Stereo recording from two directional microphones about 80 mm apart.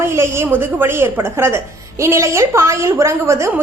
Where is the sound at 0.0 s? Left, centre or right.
Right.